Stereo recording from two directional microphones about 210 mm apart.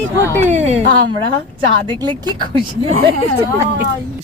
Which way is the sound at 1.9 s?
20° right (ahead or behind).